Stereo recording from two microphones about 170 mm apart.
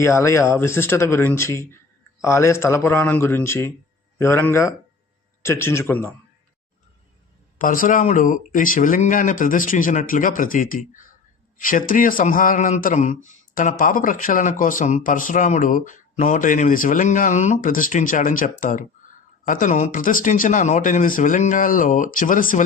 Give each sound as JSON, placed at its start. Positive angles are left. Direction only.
{"t": 0.0, "sound": "speech", "side_deg": 15}
{"t": 7.6, "sound": "speech", "side_deg": 50}